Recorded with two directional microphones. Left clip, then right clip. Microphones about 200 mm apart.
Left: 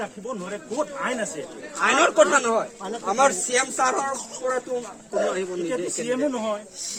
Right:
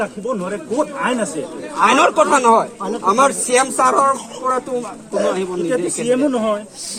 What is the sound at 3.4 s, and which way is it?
Speech, 15° right (ahead or behind).